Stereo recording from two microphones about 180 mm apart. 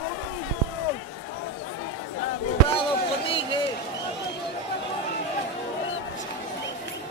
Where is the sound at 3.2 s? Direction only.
30° left (ahead or behind).